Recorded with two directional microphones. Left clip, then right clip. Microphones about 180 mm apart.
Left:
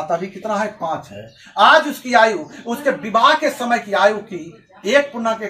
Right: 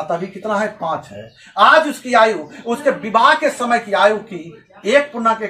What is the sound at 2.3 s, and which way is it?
A man's voice, 15° right (ahead or behind).